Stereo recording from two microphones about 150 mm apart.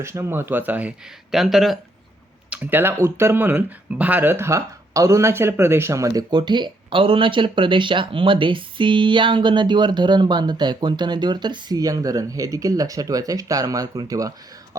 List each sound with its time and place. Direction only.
0.0 s speech: 15° right (ahead or behind); by 1.8 s centre (ahead or behind)
2.5 s speech: 10° right (ahead or behind)